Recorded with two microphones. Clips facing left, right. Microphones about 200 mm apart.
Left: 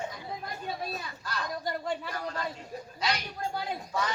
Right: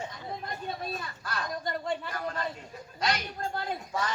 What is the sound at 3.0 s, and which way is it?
Speech, 50° right (ahead or behind).